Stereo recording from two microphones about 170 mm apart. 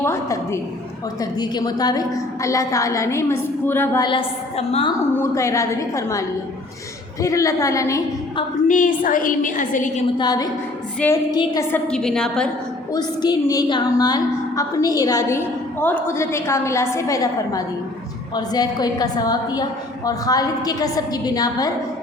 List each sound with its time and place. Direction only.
0.0 s a woman's voice: 15° left (ahead or behind)
4.0 s a woman's voice: 30° left (ahead or behind)
5.1 s a woman's voice: 15° left (ahead or behind)
8.6 s a woman's voice: 50° left (ahead or behind)
10.2 s a woman's voice: 25° left (ahead or behind)
11.7 s a woman's voice: 5° left (ahead or behind)
12.9 s a woman's voice: 20° left (ahead or behind)